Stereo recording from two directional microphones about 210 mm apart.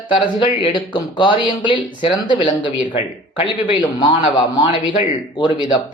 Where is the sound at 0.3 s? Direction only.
25° left (ahead or behind).